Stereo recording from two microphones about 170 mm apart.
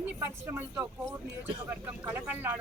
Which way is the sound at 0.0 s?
15° right (ahead or behind).